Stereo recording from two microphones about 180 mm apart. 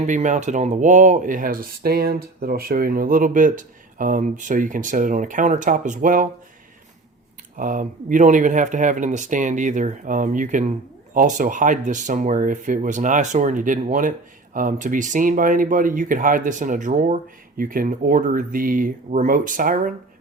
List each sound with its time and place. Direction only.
0.0 s speech: 40° right (ahead or behind)
7.5 s speech: 45° right (ahead or behind)